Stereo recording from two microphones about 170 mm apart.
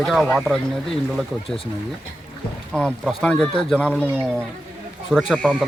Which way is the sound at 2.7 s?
5° left (ahead or behind).